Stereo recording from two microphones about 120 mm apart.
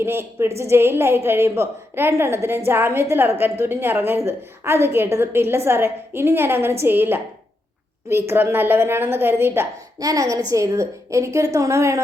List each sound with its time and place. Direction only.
0.0 s a woman's voice: 20° right (ahead or behind)
10.0 s a woman's voice: 30° right (ahead or behind)